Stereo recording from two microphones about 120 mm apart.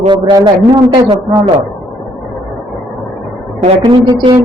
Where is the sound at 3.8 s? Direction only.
45° right (ahead or behind).